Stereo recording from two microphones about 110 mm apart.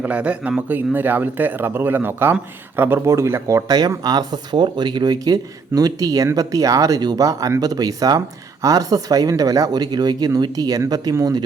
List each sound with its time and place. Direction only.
0.0 s speech: 10° right (ahead or behind); by 11.3 s 30° right (ahead or behind)